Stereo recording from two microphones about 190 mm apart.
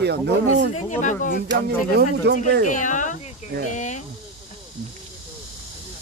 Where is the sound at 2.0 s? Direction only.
60° right (ahead or behind).